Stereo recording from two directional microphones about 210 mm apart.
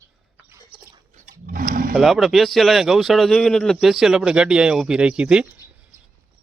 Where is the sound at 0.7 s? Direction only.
35° right (ahead or behind).